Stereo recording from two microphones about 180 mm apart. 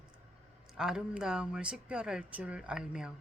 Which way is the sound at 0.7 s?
5° right (ahead or behind).